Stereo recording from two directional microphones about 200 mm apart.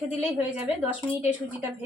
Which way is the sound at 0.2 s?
5° right (ahead or behind).